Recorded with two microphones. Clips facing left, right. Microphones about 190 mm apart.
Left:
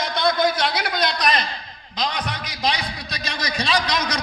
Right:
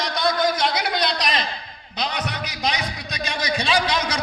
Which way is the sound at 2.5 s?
35° left (ahead or behind).